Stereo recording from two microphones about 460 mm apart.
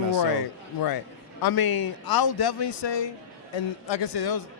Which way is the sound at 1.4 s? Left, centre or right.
Left.